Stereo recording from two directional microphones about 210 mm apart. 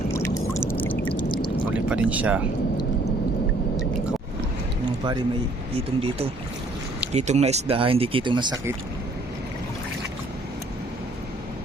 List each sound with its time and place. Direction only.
0.1 s pour: 15° left (ahead or behind)
1.1 s pour: 25° left (ahead or behind)
1.7 s speech: 5° right (ahead or behind)
5.7 s speech: 25° right (ahead or behind)